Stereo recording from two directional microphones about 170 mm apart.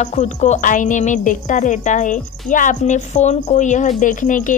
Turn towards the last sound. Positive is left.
turn(degrees=50)  # may be behind; listen again after turning